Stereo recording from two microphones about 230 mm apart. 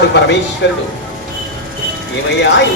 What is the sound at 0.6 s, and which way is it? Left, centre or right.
Speech, left.